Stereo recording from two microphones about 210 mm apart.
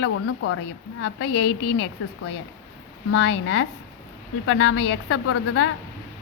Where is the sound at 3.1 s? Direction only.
60° left (ahead or behind).